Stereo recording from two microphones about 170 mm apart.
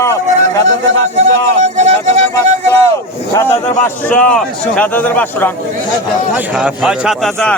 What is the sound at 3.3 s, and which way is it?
Speech, 15° left (ahead or behind).